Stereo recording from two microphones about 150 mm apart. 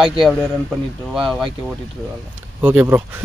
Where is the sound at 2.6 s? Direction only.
15° right (ahead or behind).